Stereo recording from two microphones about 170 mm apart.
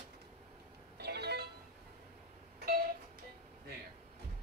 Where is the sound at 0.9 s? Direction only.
75° right (ahead or behind).